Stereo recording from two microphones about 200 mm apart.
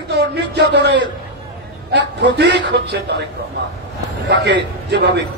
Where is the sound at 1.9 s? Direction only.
60° right (ahead or behind).